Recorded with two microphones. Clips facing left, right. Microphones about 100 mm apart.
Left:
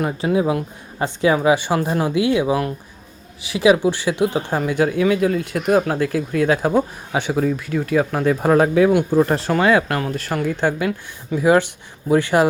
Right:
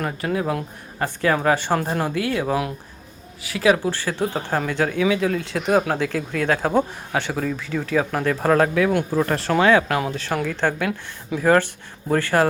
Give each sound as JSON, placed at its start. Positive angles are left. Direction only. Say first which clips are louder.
{"t": 0.3, "sound": "speech", "louder": "left 5 dB", "side_deg": 10}
{"t": 2.1, "sound": "speech", "louder": "left 7 dB", "side_deg": 15}
{"t": 9.5, "sound": "speech", "louder": "even", "side_deg": 5}
{"t": 10.8, "sound": "speech", "louder": "left 3 dB", "side_deg": 0}
{"t": 12.0, "sound": "speech", "louder": "left 3 dB", "side_deg": 15}